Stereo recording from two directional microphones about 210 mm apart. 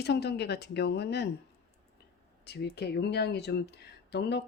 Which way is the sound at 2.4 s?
50° left (ahead or behind).